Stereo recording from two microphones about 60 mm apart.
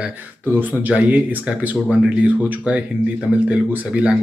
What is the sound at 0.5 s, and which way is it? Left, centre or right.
A man's voice, right.